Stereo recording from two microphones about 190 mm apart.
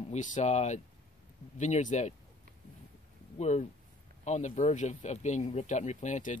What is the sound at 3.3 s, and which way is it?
Speech, 35° left (ahead or behind).